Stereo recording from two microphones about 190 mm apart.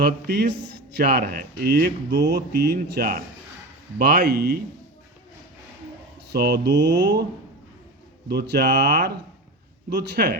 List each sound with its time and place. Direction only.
0.0 s speech: 60° right (ahead or behind)
6.3 s speech: 55° right (ahead or behind)
8.3 s speech: 60° right (ahead or behind)